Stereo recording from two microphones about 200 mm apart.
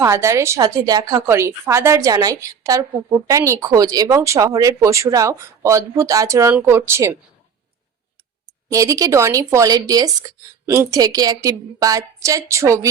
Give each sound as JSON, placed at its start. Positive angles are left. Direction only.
{"t": 0.0, "sound": "speech", "side_deg": -15}
{"t": 8.7, "sound": "speech", "side_deg": -15}